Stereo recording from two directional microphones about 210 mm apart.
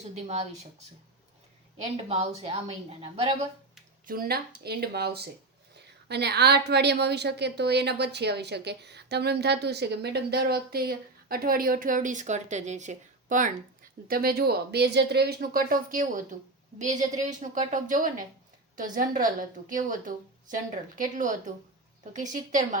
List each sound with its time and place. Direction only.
0.1 s a woman's voice: 30° right (ahead or behind)
2.0 s speech: 30° right (ahead or behind)
4.0 s a woman's voice: 45° right (ahead or behind)